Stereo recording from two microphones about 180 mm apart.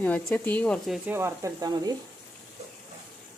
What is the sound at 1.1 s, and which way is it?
Speech, 15° right (ahead or behind).